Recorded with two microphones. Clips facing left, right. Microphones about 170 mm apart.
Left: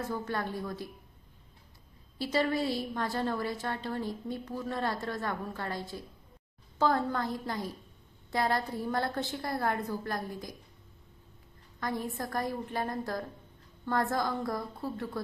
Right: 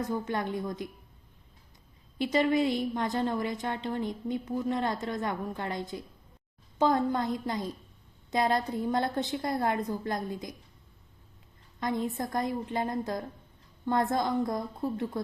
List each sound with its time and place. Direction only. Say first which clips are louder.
0.1 s a woman's voice: right 3 dB; 20° right (ahead or behind)
2.1 s a woman's voice: right 4 dB; 20° right (ahead or behind)
11.8 s a woman's voice: right 4 dB; 20° right (ahead or behind)